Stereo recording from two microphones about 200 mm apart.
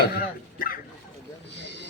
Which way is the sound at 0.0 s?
50° left (ahead or behind).